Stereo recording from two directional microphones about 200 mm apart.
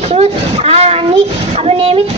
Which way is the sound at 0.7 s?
30° right (ahead or behind).